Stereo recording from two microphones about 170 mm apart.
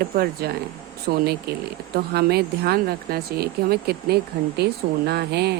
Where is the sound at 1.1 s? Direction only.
55° right (ahead or behind).